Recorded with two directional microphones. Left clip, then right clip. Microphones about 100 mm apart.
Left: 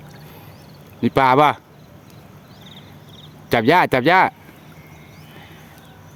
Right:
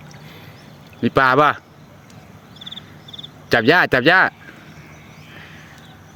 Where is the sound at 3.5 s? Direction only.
25° left (ahead or behind).